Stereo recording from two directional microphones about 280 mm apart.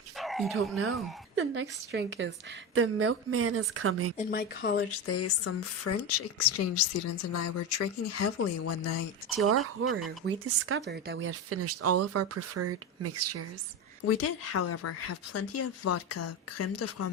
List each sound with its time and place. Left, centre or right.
0.2 s bow-wow: centre
1.4 s a woman's voice: right
4.2 s speech: left
5.0 s speech: left
9.5 s speech: right
11.3 s speech: right
14.1 s speech: left